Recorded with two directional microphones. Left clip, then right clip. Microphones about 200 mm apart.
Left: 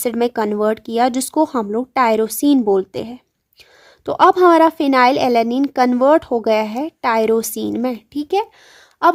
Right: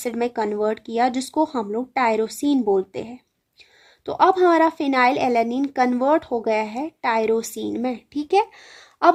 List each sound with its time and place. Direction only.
0.0 s a woman's voice: 35° left (ahead or behind); by 9.2 s 20° left (ahead or behind)